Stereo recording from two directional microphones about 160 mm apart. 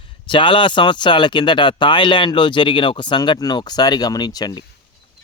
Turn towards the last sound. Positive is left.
turn(degrees=25)  # may be behind; listen again after turning